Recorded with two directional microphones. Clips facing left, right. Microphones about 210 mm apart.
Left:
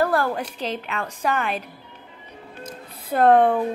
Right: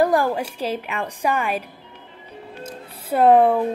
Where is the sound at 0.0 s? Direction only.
15° right (ahead or behind).